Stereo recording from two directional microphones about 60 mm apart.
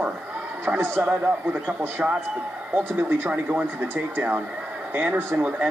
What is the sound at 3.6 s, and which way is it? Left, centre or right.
Speech, right.